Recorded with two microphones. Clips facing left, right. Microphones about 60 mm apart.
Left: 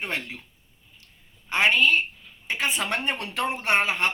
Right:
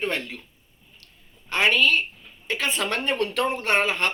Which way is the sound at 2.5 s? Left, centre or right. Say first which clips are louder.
Right 1 dB; centre.